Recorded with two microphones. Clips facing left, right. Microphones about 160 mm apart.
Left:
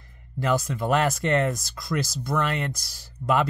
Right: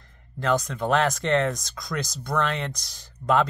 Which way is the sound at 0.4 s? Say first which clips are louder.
Even; 5° left (ahead or behind).